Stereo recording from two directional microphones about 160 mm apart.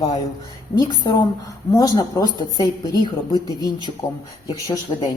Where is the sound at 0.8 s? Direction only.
25° left (ahead or behind).